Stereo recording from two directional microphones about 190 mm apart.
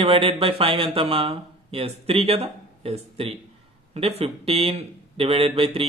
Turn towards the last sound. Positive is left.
turn(degrees=-30)  # may be behind; listen again after turning